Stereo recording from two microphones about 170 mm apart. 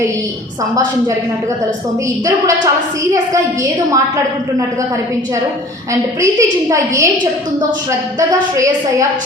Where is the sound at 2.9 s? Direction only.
20° right (ahead or behind).